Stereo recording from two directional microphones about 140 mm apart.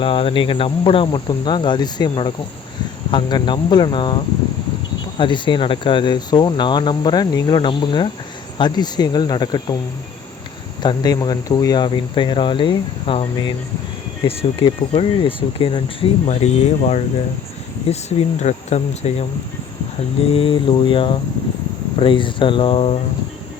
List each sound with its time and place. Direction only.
0.0 s speech: 40° left (ahead or behind)
10.8 s speech: 30° left (ahead or behind)
16.2 s speech: 50° left (ahead or behind)
20.3 s speech: 40° left (ahead or behind)